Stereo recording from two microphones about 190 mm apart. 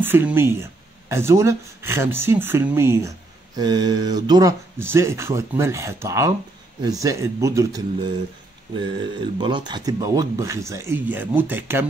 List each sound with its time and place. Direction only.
0.0 s speech: 10° right (ahead or behind)